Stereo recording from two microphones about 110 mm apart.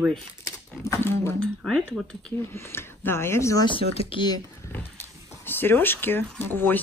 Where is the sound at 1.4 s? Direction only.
5° left (ahead or behind).